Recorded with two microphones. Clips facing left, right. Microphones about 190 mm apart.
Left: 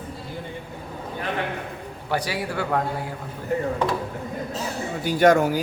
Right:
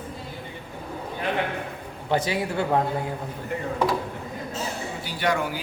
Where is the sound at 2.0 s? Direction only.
25° right (ahead or behind).